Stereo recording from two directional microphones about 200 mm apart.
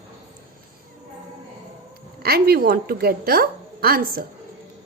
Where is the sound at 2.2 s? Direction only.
50° right (ahead or behind).